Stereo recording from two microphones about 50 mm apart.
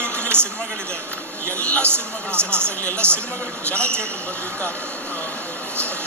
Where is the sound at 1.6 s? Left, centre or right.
Left.